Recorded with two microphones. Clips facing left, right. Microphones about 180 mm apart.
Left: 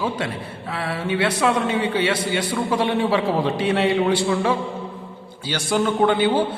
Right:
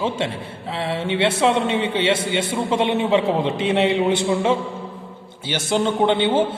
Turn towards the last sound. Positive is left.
turn(degrees=-25)  # may be behind; listen again after turning